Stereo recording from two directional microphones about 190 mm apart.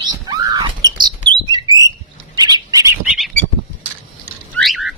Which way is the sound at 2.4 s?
20° right (ahead or behind).